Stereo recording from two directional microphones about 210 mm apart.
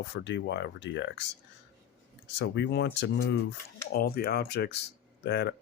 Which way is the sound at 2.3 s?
55° left (ahead or behind).